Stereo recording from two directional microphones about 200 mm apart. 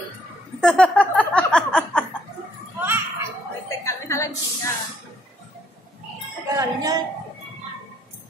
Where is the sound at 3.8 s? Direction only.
15° left (ahead or behind).